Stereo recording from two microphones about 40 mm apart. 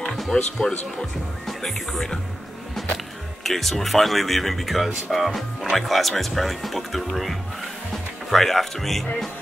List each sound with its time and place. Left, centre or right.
0.3 s speech: centre
1.6 s speech: centre
3.4 s speech: centre